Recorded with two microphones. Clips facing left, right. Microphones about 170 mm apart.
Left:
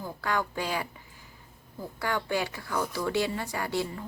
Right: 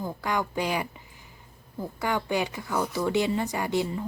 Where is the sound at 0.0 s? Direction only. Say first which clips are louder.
Right 2 dB; 15° right (ahead or behind).